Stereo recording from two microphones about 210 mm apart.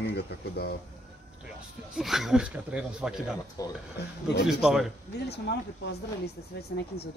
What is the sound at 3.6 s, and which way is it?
Speech, 15° left (ahead or behind).